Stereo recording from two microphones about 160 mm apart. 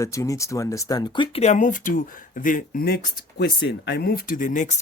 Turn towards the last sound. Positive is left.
turn(degrees=50)  # may be behind; listen again after turning